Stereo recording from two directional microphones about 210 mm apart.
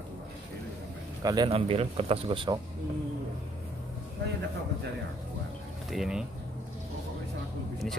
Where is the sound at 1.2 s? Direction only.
20° right (ahead or behind).